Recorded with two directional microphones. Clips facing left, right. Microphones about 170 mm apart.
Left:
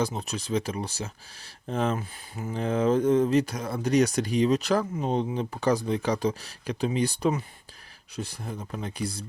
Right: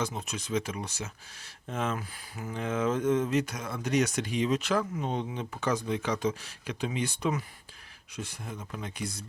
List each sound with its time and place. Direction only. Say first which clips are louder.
0.0 s speech: left 5 dB; 35° left (ahead or behind)